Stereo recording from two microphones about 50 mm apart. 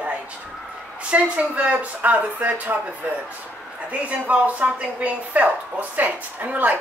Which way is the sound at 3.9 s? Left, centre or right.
Right.